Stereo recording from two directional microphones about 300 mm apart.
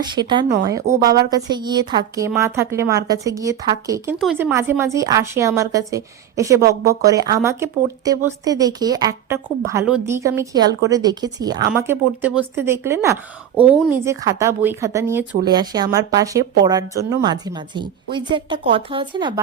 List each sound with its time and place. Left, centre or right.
0.0 s a woman's voice: centre
0.5 s speech: right
1.0 s a woman's voice: centre